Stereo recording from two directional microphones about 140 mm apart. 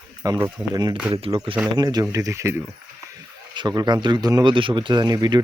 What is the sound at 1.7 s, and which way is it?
Speech, 30° right (ahead or behind).